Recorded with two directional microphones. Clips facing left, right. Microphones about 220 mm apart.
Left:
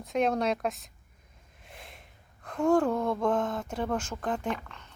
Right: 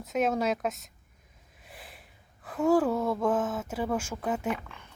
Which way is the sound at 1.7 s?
Centre (ahead or behind).